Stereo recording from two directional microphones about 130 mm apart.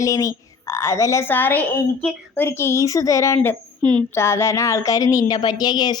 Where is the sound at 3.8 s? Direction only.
10° left (ahead or behind).